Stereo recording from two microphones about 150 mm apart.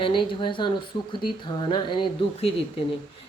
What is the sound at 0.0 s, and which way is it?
Speech, 35° left (ahead or behind).